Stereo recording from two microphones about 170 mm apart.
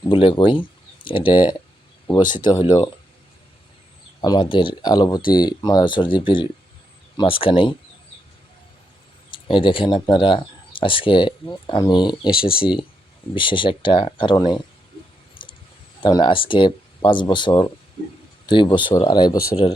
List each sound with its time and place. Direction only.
0.0 s speech: 30° left (ahead or behind)
4.2 s speech: 25° left (ahead or behind)
9.5 s speech: 30° left (ahead or behind)
15.4 s a sound: 30° left (ahead or behind)
16.0 s speech: 25° left (ahead or behind)